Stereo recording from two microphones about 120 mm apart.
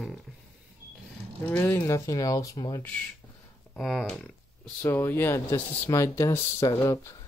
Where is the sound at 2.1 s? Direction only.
30° left (ahead or behind).